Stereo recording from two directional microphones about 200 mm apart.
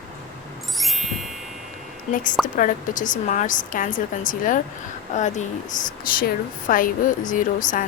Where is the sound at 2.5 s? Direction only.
40° left (ahead or behind).